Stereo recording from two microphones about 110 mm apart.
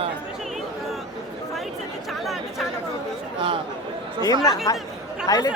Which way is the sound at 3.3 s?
50° right (ahead or behind).